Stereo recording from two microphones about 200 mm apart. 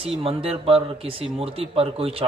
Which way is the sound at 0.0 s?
30° right (ahead or behind).